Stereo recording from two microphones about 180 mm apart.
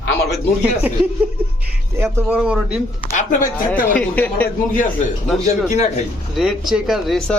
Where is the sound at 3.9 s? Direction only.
10° left (ahead or behind).